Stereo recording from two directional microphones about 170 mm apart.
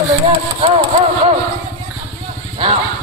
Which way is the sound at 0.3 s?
35° right (ahead or behind).